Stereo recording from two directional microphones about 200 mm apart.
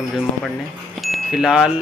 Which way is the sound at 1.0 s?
Centre (ahead or behind).